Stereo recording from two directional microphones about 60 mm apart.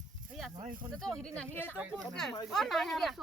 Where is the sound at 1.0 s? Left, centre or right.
Centre.